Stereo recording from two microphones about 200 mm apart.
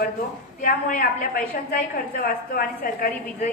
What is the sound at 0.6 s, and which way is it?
Speech, 40° left (ahead or behind).